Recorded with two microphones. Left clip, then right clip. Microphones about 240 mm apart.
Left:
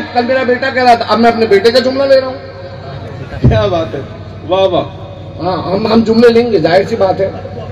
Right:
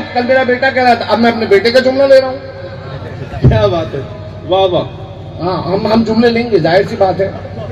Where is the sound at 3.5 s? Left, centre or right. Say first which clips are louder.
Even; left.